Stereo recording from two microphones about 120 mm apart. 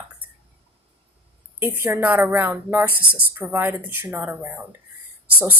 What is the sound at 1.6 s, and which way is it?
A woman's voice, 20° right (ahead or behind).